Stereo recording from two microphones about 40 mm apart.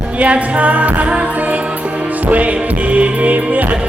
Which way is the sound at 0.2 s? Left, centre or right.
Right.